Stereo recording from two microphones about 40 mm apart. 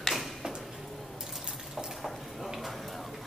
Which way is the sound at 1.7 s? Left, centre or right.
Centre.